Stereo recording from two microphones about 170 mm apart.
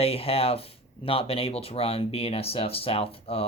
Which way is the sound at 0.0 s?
35° left (ahead or behind).